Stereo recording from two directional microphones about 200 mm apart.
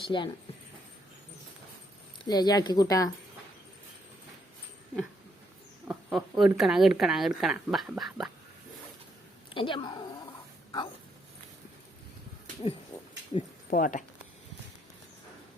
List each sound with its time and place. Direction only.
0.0 s speech: 25° left (ahead or behind)
2.2 s speech: 20° left (ahead or behind)
5.9 s speech: 5° right (ahead or behind)
9.6 s speech: 25° left (ahead or behind)
12.9 s a sound: 10° left (ahead or behind)
13.7 s speech: 40° left (ahead or behind)